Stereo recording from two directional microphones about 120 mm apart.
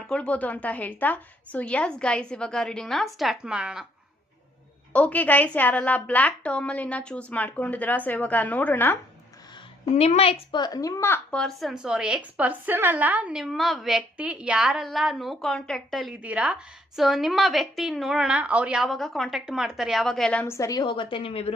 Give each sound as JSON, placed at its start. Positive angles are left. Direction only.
{"t": 0.1, "sound": "a woman's voice", "side_deg": 10}
{"t": 4.9, "sound": "a woman's voice", "side_deg": 10}
{"t": 9.9, "sound": "a woman's voice", "side_deg": 65}
{"t": 10.6, "sound": "a woman's voice", "side_deg": 30}
{"t": 11.3, "sound": "a woman's voice", "side_deg": 5}
{"t": 16.2, "sound": "a woman's voice", "side_deg": -10}
{"t": 20.5, "sound": "a woman's voice", "side_deg": 25}
{"t": 20.8, "sound": "a woman's voice", "side_deg": 45}